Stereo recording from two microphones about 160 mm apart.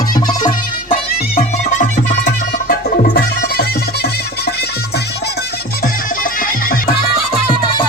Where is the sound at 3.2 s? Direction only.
70° left (ahead or behind).